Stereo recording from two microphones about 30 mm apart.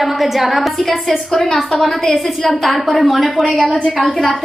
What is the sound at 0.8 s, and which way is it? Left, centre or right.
A woman's voice, centre.